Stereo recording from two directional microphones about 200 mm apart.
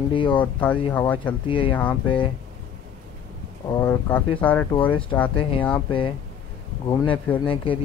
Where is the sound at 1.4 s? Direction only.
25° left (ahead or behind).